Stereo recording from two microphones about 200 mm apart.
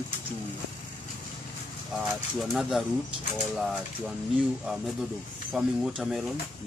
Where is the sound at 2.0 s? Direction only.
Centre (ahead or behind).